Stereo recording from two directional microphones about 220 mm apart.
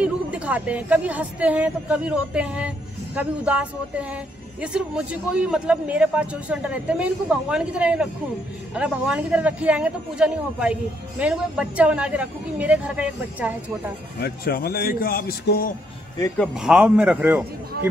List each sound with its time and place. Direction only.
0.0 s speech: 5° right (ahead or behind)
14.2 s a man's voice: 45° left (ahead or behind)
16.5 s speech: 5° right (ahead or behind)